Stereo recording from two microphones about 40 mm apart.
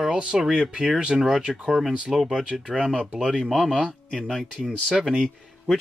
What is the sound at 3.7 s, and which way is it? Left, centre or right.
Speech, right.